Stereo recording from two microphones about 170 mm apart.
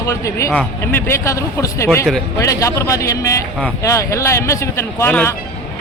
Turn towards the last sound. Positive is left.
turn(degrees=15)  # may be behind; listen again after turning